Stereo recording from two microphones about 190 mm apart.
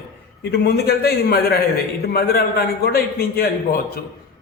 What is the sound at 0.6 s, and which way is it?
A man's voice, 55° left (ahead or behind).